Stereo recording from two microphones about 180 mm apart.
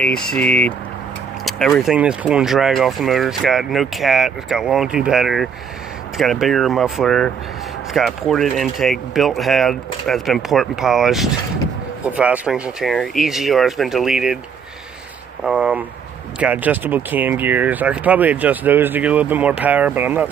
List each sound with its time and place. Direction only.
0.0 s speech: 5° left (ahead or behind)
15.4 s speech: 5° right (ahead or behind)